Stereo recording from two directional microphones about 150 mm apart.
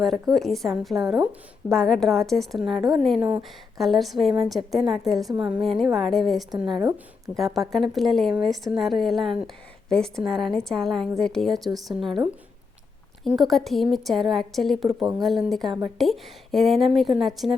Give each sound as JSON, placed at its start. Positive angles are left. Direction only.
{"t": 0.0, "sound": "speech", "side_deg": 0}
{"t": 3.2, "sound": "speech", "side_deg": -10}
{"t": 3.8, "sound": "speech", "side_deg": 0}
{"t": 6.7, "sound": "a woman's voice", "side_deg": -30}
{"t": 7.3, "sound": "speech", "side_deg": 0}